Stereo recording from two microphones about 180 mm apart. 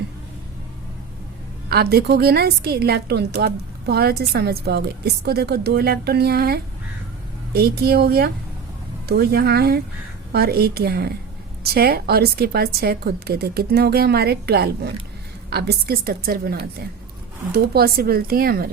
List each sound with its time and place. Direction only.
1.7 s a woman's voice: 60° right (ahead or behind)